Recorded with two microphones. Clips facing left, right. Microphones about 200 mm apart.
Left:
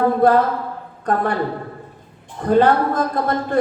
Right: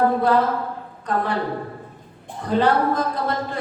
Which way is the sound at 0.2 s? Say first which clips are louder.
Left 4 dB; 50° left (ahead or behind).